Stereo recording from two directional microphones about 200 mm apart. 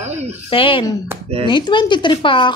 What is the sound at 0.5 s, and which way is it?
Speech, 25° left (ahead or behind).